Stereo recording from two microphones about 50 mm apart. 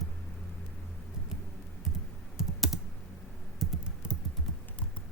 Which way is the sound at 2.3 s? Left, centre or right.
Centre.